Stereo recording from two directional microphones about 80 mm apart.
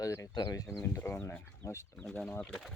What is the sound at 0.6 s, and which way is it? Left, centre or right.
Speech, left.